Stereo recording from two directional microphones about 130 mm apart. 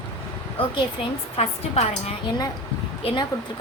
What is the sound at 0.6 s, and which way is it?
A woman's voice, 45° left (ahead or behind).